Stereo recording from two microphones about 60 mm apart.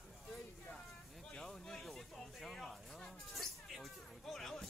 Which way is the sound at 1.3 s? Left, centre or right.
Centre.